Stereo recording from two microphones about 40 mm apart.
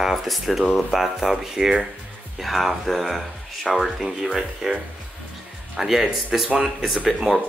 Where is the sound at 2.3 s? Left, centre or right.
Centre.